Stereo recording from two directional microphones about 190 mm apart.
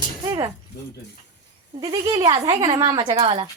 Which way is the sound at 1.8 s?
25° right (ahead or behind).